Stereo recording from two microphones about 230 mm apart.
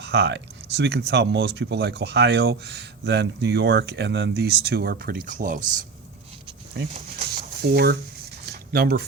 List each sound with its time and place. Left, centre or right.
0.0 s speech: right
6.8 s speech: right
7.3 s a sound: right